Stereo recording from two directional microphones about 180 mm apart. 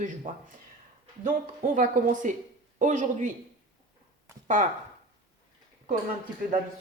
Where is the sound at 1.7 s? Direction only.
45° right (ahead or behind).